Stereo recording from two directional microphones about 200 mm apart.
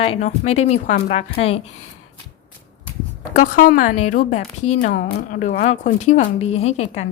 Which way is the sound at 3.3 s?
40° left (ahead or behind).